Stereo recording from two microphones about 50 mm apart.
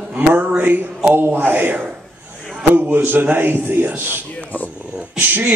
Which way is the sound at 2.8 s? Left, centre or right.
Right.